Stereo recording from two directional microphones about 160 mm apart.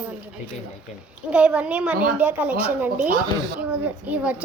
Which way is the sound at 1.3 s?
5° right (ahead or behind).